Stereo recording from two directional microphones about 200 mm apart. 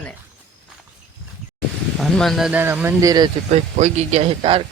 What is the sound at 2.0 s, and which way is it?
Speech, centre (ahead or behind).